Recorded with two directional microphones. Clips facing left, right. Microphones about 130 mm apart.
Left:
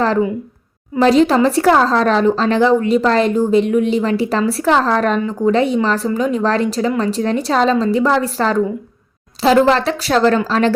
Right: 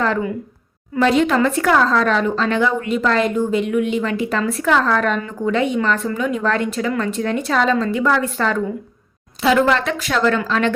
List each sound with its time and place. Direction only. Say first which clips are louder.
0.9 s speech: left 4 dB; 35° left (ahead or behind)